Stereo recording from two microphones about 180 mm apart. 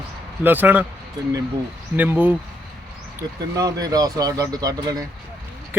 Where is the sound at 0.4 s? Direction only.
10° right (ahead or behind).